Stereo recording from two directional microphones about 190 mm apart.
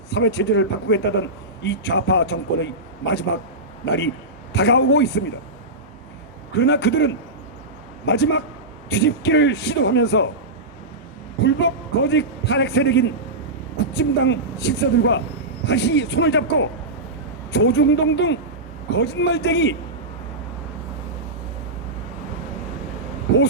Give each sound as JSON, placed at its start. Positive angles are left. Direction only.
{"t": 0.1, "sound": "a man's voice", "side_deg": 60}
{"t": 6.5, "sound": "a man's voice", "side_deg": 60}
{"t": 11.4, "sound": "a man's voice", "side_deg": 65}